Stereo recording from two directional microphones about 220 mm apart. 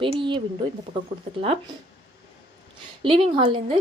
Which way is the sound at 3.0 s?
25° right (ahead or behind).